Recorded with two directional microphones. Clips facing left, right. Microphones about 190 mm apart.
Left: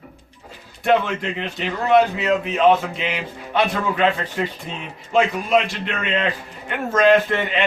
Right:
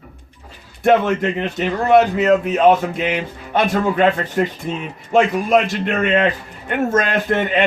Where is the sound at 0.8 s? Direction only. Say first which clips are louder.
Right 4 dB; 45° right (ahead or behind).